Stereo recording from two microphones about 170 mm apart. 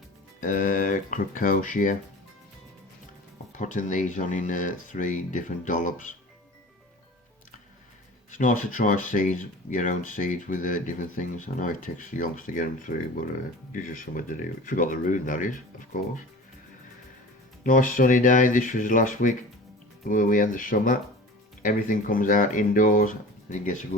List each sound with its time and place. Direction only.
0.3 s speech: 50° left (ahead or behind)
3.6 s speech: 50° left (ahead or behind)
8.3 s speech: 50° left (ahead or behind)
17.6 s speech: 50° left (ahead or behind)